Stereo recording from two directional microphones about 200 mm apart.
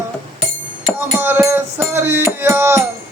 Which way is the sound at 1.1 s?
10° right (ahead or behind).